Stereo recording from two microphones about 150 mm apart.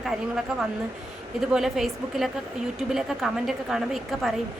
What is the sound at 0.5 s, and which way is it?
Speech, 5° right (ahead or behind).